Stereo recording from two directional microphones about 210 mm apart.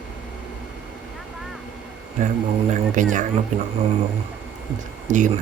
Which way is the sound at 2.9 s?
40° right (ahead or behind).